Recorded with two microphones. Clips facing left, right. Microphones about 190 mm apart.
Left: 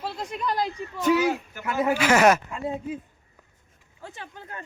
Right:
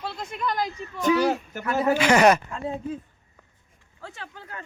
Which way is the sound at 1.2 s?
40° right (ahead or behind).